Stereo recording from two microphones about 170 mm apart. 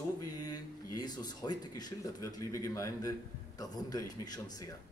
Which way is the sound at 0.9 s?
25° left (ahead or behind).